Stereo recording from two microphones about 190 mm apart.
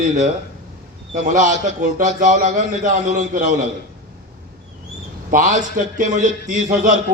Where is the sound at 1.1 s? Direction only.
40° right (ahead or behind).